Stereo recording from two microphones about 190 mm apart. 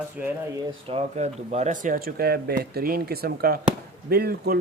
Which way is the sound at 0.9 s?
35° right (ahead or behind).